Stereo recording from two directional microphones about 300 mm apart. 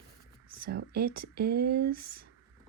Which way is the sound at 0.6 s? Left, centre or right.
Right.